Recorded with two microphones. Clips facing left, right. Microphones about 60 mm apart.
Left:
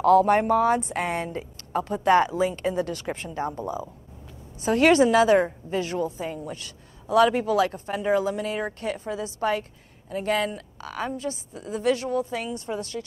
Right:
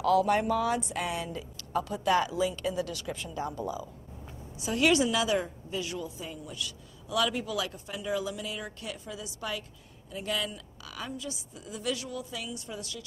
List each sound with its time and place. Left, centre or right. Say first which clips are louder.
0.0 s a woman's voice: left 7 dB; left